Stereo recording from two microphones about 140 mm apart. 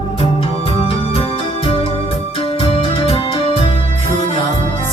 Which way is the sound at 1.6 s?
45° left (ahead or behind).